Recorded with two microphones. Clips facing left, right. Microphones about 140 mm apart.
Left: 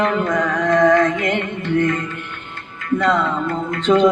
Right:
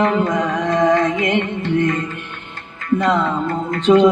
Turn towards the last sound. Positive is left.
turn(degrees=-25)  # may be behind; listen again after turning